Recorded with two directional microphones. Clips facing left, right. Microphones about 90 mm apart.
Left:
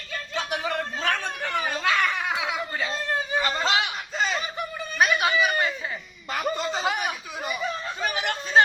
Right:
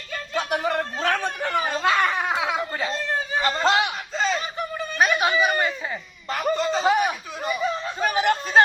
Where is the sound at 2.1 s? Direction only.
30° right (ahead or behind).